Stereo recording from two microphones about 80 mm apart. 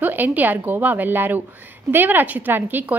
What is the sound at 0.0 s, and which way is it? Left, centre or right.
A woman's voice, right.